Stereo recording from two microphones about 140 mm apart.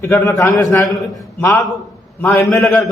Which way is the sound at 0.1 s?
20° left (ahead or behind).